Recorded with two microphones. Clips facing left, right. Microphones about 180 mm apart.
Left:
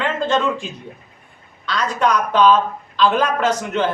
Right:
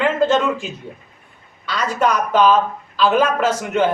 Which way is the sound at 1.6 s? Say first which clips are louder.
Even; 5° right (ahead or behind).